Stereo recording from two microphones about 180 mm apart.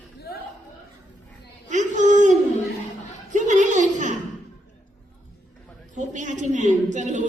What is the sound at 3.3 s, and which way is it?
Chuckle, 45° right (ahead or behind).